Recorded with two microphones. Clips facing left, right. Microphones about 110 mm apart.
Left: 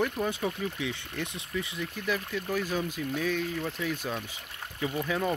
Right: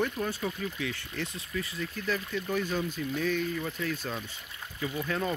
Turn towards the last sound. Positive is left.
turn(degrees=10)  # may be behind; listen again after turning